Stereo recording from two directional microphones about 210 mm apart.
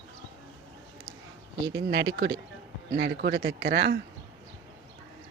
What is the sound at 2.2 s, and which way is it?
Speech, 55° right (ahead or behind).